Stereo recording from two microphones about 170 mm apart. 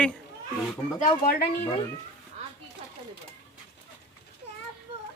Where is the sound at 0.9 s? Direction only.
50° left (ahead or behind).